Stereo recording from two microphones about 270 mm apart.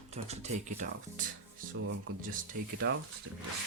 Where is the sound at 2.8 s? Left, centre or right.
Right.